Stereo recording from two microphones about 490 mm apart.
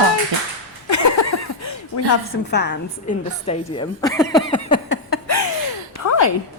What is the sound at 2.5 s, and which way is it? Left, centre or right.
A woman's voice, centre.